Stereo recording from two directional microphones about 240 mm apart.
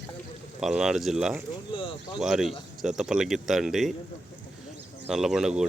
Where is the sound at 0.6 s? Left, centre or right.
Centre.